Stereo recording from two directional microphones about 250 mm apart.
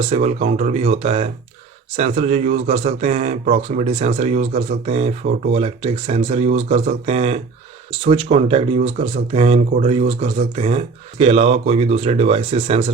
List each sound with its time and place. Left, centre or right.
0.0 s speech: right